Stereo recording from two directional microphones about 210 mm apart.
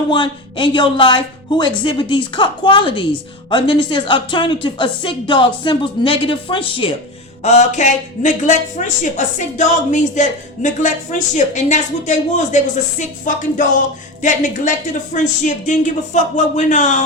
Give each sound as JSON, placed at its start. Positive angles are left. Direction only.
{"t": 0.1, "sound": "a woman's voice", "side_deg": 25}